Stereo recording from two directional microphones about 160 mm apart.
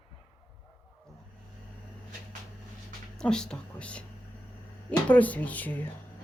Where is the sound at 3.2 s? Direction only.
5° left (ahead or behind).